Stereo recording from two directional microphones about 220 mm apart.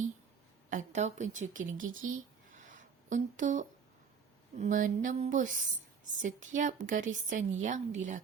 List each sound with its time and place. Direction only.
0.7 s a woman's voice: 35° right (ahead or behind)
2.6 s a sound: 35° right (ahead or behind)
4.5 s a woman's voice: 35° right (ahead or behind)